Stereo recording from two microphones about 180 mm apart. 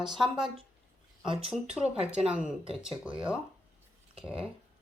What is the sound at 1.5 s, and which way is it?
Speech, 5° right (ahead or behind).